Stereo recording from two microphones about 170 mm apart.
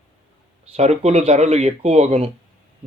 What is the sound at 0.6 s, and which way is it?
A man's voice, 40° right (ahead or behind).